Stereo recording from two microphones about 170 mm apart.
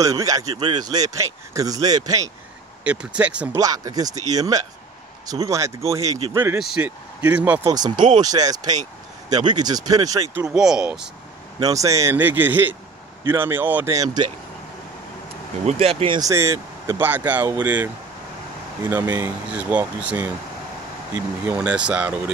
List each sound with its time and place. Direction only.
0.0 s speech: 20° right (ahead or behind)
2.8 s speech: 5° right (ahead or behind)
3.5 s speech: 20° right (ahead or behind)
7.7 s speech: 25° right (ahead or behind)
10.3 s speech: 5° right (ahead or behind)
11.6 s speech: 20° right (ahead or behind)
15.6 s speech: 35° right (ahead or behind)
16.2 s speech: 15° right (ahead or behind)
21.5 s speech: 5° right (ahead or behind)